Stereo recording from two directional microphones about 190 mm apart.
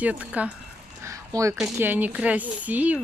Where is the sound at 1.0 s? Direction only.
15° right (ahead or behind).